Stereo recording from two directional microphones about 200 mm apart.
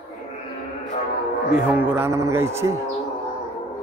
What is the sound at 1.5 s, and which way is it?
Speech, 5° right (ahead or behind).